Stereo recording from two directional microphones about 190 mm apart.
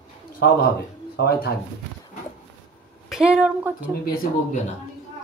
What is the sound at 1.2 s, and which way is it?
Speech, 55° left (ahead or behind).